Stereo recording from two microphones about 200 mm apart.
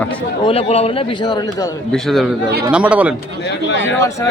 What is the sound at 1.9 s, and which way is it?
Speech, centre (ahead or behind).